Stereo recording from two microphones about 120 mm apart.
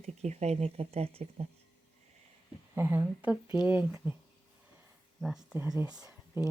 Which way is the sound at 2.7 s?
20° right (ahead or behind).